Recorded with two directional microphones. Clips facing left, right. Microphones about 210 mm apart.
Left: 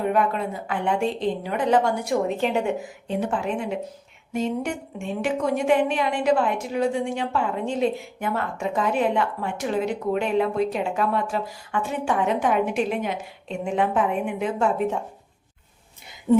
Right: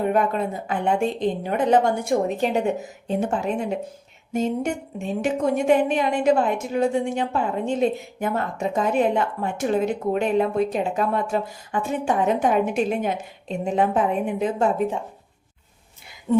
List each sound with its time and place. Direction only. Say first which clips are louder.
0.1 s a woman's voice: right 1 dB; 45° right (ahead or behind)
1.7 s a woman's voice: right 2 dB; 25° right (ahead or behind)
2.4 s a woman's voice: right 1 dB; 35° right (ahead or behind)
16.3 s speech: left 1 dB; 15° left (ahead or behind)